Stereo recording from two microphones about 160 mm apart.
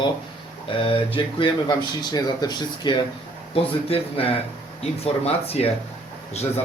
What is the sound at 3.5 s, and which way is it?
A man's voice, 35° left (ahead or behind).